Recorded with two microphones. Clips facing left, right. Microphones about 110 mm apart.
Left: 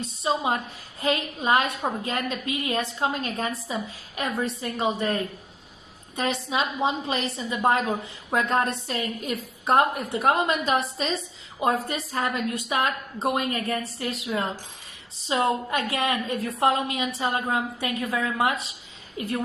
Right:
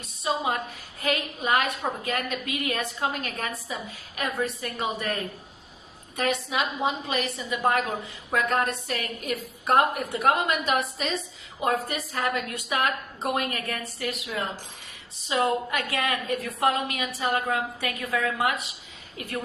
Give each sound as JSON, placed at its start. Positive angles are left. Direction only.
{"t": 0.0, "sound": "a woman's voice", "side_deg": 30}